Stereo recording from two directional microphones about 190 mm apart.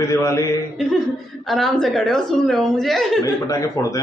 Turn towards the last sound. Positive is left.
turn(degrees=15)  # may be behind; listen again after turning